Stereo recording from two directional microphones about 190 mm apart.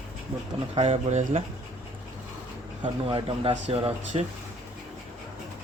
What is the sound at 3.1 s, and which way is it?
A man's voice, 25° right (ahead or behind).